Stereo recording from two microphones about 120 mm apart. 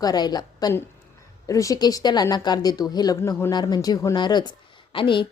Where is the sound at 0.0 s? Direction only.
35° left (ahead or behind).